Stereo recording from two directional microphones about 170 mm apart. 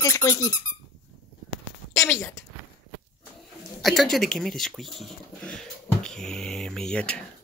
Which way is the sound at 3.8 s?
Centre (ahead or behind).